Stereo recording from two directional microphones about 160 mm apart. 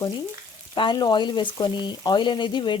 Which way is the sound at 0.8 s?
30° left (ahead or behind).